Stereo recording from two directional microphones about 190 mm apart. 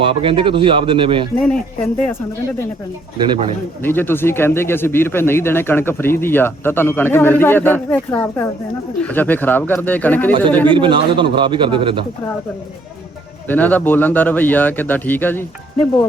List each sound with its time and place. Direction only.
0.0 s a man's voice: 30° right (ahead or behind)
1.5 s speech: 5° left (ahead or behind)
3.2 s a man's voice: 25° right (ahead or behind)
3.8 s speech: 10° left (ahead or behind)
10.7 s a man's voice: 25° right (ahead or behind)
13.5 s speech: 10° left (ahead or behind)